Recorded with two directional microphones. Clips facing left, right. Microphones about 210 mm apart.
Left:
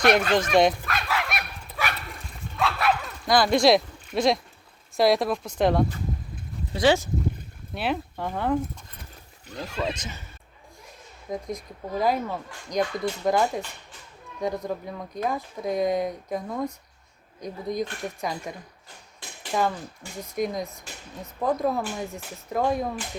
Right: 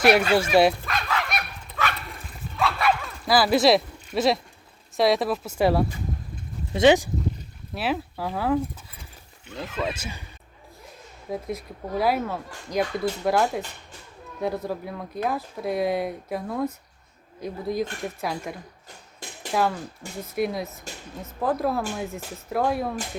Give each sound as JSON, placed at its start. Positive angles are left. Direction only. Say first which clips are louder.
{"t": 0.0, "sound": "speech", "louder": "right 2 dB", "side_deg": -10}
{"t": 1.0, "sound": "fowl", "louder": "even", "side_deg": 5}
{"t": 2.6, "sound": "dog", "louder": "right 1 dB", "side_deg": 0}
{"t": 4.9, "sound": "speech", "louder": "even", "side_deg": 0}
{"t": 6.7, "sound": "speech", "louder": "right 4 dB", "side_deg": -20}
{"t": 7.7, "sound": "speech", "louder": "right 1 dB", "side_deg": 0}
{"t": 11.3, "sound": "speech", "louder": "right 1 dB", "side_deg": -5}
{"t": 19.5, "sound": "speech", "louder": "right 1 dB", "side_deg": 0}